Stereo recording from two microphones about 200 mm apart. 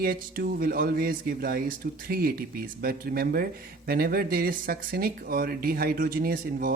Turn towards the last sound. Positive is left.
turn(degrees=-45)  # may be behind; listen again after turning